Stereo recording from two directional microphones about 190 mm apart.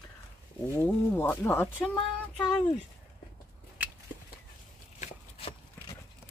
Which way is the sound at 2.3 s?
25° left (ahead or behind).